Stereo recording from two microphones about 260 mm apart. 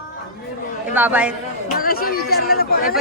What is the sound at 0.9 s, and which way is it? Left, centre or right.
Speech, centre.